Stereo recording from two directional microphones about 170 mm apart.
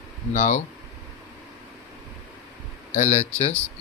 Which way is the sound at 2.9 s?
40° left (ahead or behind).